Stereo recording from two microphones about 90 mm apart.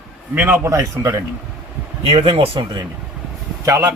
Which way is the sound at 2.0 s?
90° right.